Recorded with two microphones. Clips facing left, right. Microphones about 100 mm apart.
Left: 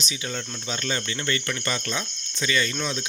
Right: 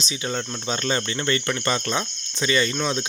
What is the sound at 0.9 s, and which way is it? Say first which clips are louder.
Speech: right 4 dB; 35° right (ahead or behind).